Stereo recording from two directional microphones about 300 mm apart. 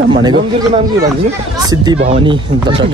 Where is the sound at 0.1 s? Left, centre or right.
Centre.